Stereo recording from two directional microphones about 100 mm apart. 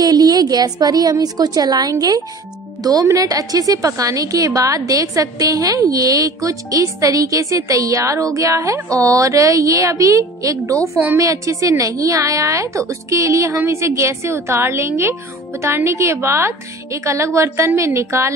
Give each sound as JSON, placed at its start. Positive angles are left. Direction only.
{"t": 0.0, "sound": "a woman's voice", "side_deg": -40}